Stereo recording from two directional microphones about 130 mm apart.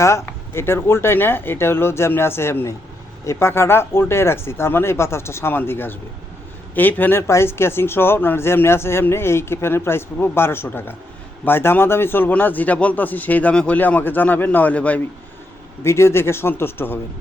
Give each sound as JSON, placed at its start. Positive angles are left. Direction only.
{"t": 0.0, "sound": "speech", "side_deg": 20}